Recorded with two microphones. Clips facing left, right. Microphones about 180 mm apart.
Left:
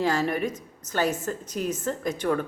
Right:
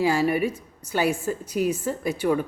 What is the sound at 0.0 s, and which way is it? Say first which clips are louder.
A woman's voice: right 3 dB; 10° right (ahead or behind).